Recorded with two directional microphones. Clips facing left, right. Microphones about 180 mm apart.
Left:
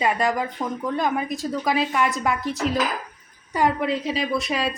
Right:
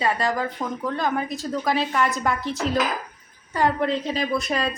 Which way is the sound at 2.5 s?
40° right (ahead or behind).